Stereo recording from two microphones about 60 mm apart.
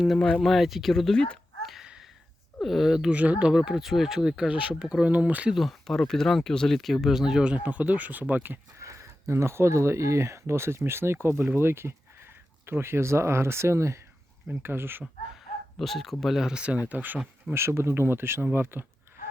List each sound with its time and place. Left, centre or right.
0.4 s speech: centre
1.6 s a sound: centre
2.6 s speech: centre
3.1 s speech: right
5.5 s speech: centre; by 8.5 s right
8.8 s speech: right
14.6 s speech: right
15.8 s speech: centre
16.5 s speech: centre
17.5 s speech: right